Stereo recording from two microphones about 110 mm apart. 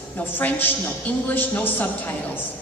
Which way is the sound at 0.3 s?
15° left (ahead or behind).